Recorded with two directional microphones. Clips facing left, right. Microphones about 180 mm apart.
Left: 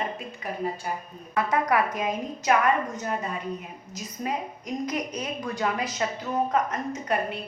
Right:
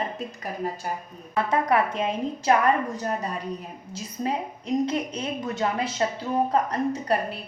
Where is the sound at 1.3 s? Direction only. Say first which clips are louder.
Right 1 dB; 25° right (ahead or behind).